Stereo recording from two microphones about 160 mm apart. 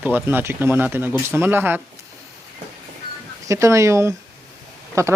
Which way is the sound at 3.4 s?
20° right (ahead or behind).